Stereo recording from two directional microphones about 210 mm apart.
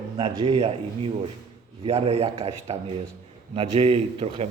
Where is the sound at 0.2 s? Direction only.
25° right (ahead or behind).